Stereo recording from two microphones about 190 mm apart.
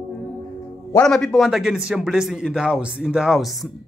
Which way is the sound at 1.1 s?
5° left (ahead or behind).